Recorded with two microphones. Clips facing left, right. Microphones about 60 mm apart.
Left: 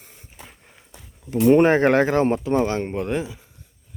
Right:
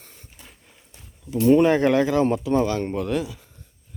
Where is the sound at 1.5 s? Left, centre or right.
Left.